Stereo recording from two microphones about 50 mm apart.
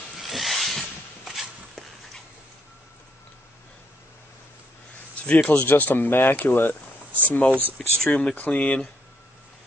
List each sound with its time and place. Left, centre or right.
0.2 s a sound: centre
5.2 s speech: left
7.2 s speech: left
8.0 s speech: centre